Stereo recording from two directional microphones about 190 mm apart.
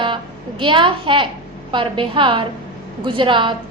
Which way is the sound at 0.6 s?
25° right (ahead or behind).